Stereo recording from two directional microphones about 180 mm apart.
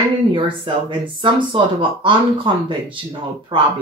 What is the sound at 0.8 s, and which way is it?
Speech, 25° right (ahead or behind).